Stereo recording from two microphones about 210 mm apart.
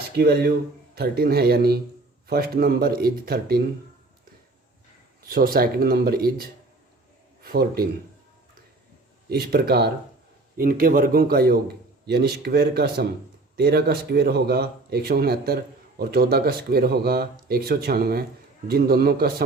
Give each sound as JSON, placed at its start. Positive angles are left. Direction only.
{"t": 0.2, "sound": "speech", "side_deg": -45}
{"t": 5.2, "sound": "speech", "side_deg": -45}
{"t": 9.3, "sound": "speech", "side_deg": -50}